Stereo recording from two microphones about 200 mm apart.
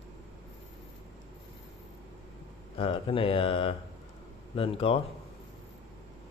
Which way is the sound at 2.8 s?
25° left (ahead or behind).